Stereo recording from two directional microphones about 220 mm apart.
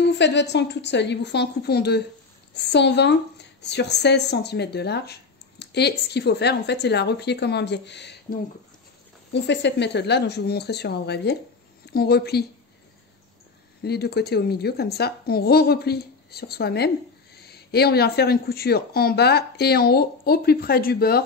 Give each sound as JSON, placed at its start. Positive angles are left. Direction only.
{"t": 0.2, "sound": "a woman's voice", "side_deg": 50}
{"t": 13.8, "sound": "a woman's voice", "side_deg": 45}